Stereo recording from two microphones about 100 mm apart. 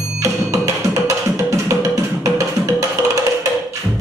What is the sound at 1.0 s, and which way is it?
Music, 35° right (ahead or behind).